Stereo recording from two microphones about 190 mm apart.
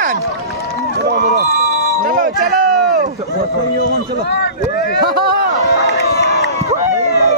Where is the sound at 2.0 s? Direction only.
50° right (ahead or behind).